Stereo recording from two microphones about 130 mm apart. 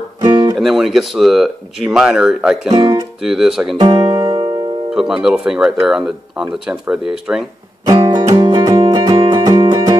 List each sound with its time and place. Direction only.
0.2 s music: 30° right (ahead or behind)
0.6 s speech: centre (ahead or behind)
2.7 s speech: 35° right (ahead or behind)
3.2 s speech: 5° right (ahead or behind)
3.7 s music: 35° right (ahead or behind)
4.9 s speech: 5° right (ahead or behind)
7.8 s music: 30° right (ahead or behind)